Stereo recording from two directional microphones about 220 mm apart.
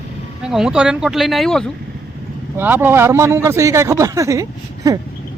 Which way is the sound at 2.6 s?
10° right (ahead or behind).